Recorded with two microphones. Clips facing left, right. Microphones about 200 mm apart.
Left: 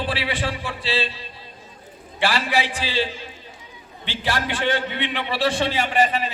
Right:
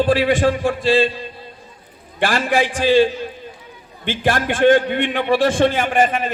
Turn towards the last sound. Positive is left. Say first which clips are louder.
# right 3 dB
turn(degrees=-50)  # may be behind; listen again after turning